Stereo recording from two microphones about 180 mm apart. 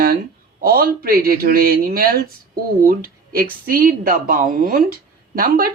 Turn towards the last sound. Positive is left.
turn(degrees=-55)  # may be behind; listen again after turning